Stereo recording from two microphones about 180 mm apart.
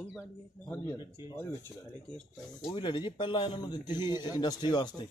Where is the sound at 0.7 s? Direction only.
15° left (ahead or behind).